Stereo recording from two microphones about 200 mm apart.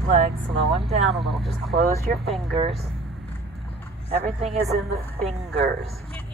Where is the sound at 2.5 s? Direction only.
30° right (ahead or behind).